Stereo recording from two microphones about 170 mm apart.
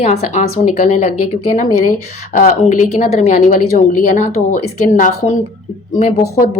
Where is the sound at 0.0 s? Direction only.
40° left (ahead or behind).